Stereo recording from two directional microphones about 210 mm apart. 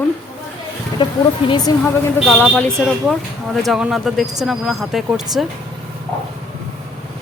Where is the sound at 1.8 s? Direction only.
5° left (ahead or behind).